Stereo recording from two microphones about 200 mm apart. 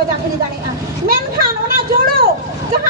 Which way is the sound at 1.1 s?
50° right (ahead or behind).